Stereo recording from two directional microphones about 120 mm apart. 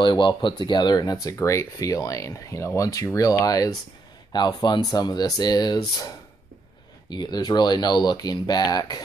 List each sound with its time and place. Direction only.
0.0 s speech: 40° left (ahead or behind)
7.1 s speech: 35° left (ahead or behind)